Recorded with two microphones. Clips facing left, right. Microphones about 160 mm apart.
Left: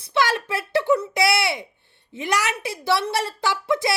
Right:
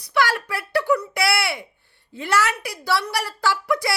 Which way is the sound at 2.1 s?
15° left (ahead or behind).